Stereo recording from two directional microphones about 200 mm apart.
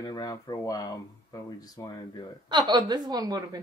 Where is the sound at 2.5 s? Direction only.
25° right (ahead or behind).